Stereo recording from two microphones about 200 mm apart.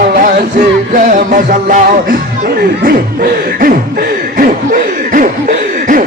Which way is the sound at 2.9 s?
45° right (ahead or behind).